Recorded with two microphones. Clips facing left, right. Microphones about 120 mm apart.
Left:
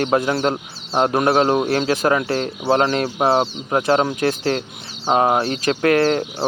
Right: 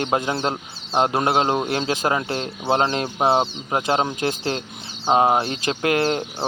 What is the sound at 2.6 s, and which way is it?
Speech, 25° right (ahead or behind).